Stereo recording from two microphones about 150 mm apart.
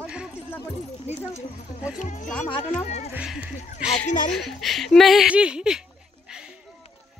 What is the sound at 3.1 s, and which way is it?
Speech, 5° right (ahead or behind).